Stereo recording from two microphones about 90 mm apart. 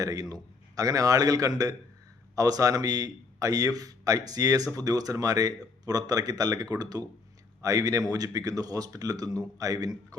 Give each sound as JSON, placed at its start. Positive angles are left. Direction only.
{"t": 0.0, "sound": "a man's voice", "side_deg": -45}